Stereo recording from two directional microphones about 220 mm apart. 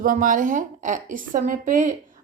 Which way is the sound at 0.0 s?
35° right (ahead or behind).